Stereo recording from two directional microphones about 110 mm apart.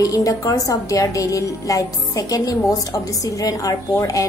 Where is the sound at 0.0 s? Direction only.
30° left (ahead or behind).